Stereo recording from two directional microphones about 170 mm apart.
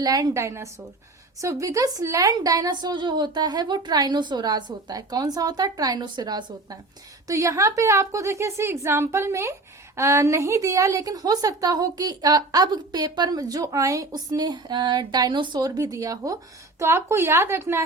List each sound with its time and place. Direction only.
0.0 s a woman's voice: 20° right (ahead or behind)